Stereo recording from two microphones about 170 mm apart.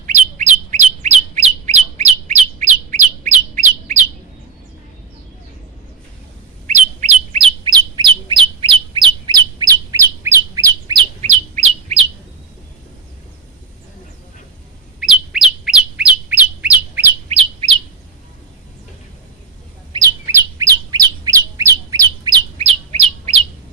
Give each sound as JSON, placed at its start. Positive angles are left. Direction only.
{"t": 0.0, "sound": "bird", "side_deg": -45}
{"t": 6.7, "sound": "bird", "side_deg": -45}
{"t": 7.6, "sound": "bird", "side_deg": -25}
{"t": 11.2, "sound": "bird", "side_deg": -40}
{"t": 15.0, "sound": "bird", "side_deg": 0}
{"t": 17.2, "sound": "bird", "side_deg": -35}
{"t": 19.9, "sound": "bird", "side_deg": -20}
{"t": 22.5, "sound": "bird", "side_deg": -35}